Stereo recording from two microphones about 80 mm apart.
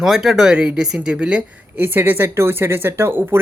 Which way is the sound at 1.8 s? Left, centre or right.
Right.